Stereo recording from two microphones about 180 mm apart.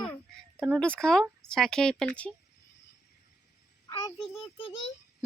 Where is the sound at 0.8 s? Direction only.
5° left (ahead or behind).